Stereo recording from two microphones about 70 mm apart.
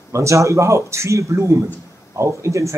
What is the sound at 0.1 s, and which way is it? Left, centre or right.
Speech, right.